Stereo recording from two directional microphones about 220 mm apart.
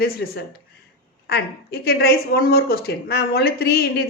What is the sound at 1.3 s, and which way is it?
A woman's voice, 45° left (ahead or behind).